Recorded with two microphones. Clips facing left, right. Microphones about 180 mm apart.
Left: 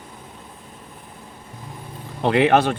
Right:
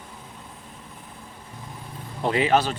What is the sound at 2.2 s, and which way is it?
Speech, 70° left (ahead or behind).